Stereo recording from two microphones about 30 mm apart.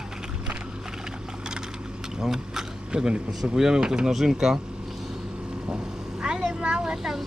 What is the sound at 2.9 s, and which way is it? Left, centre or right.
Speech, right.